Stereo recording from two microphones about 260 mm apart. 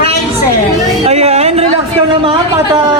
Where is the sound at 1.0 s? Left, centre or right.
Right.